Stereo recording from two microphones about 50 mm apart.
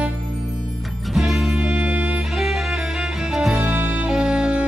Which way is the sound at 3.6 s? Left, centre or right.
Right.